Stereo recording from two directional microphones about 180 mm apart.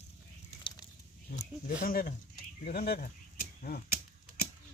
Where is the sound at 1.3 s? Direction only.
40° left (ahead or behind).